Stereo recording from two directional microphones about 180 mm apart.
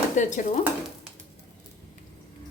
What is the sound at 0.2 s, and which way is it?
Speech, 45° left (ahead or behind).